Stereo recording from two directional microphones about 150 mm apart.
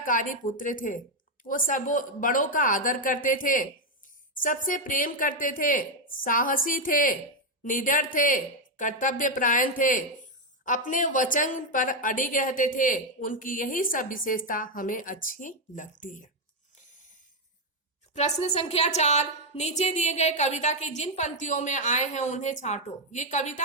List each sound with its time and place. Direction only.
0.0 s a woman's voice: 65° left (ahead or behind)
18.1 s a woman's voice: 45° left (ahead or behind)